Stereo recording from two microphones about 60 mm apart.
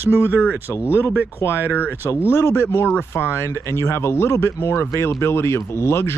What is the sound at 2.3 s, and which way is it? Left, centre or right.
Speech, left.